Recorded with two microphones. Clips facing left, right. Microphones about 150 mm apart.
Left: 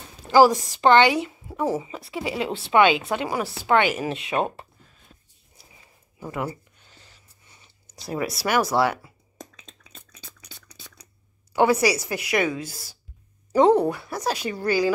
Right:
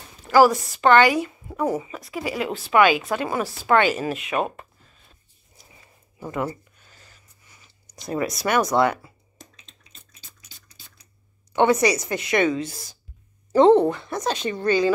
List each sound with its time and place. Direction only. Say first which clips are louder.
0.3 s a woman's voice: even; 30° left (ahead or behind)
4.2 s a woman's voice: even; 30° left (ahead or behind)
7.9 s a woman's voice: right 2 dB; 10° left (ahead or behind)
11.5 s a woman's voice: right 1 dB; 5° left (ahead or behind)